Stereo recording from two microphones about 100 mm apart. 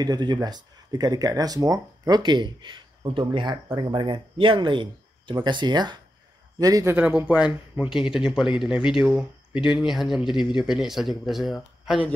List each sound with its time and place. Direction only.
0.0 s speech: 45° right (ahead or behind)
6.6 s a man's voice: 35° right (ahead or behind)
6.9 s speech: 15° right (ahead or behind)